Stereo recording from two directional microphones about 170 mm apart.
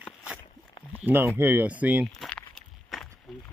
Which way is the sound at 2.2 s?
5° left (ahead or behind).